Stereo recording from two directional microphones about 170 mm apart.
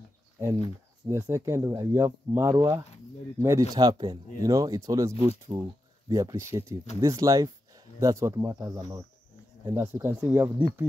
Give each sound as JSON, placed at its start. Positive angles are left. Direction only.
{"t": 1.0, "sound": "speech", "side_deg": -15}